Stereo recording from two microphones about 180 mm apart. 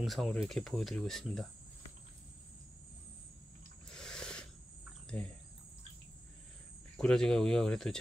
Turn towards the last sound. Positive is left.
turn(degrees=5)  # may be behind; listen again after turning